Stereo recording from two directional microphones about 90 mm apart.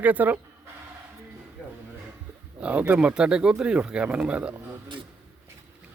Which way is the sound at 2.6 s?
15° right (ahead or behind).